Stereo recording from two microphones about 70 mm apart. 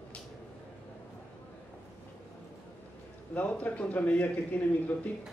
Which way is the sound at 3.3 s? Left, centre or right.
Left.